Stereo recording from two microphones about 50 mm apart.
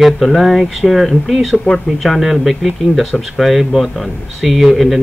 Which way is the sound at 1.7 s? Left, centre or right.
Left.